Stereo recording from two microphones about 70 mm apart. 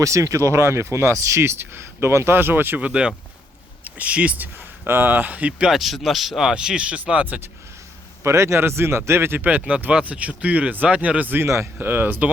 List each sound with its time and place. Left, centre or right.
0.0 s speech: right; by 4.4 s centre
4.9 s speech: right
5.7 s speech: centre
8.2 s speech: right
9.6 s speech: centre
11.4 s speech: right
11.8 s speech: right